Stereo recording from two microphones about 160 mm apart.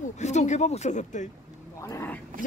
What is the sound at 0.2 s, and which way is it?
Speech, 45° left (ahead or behind).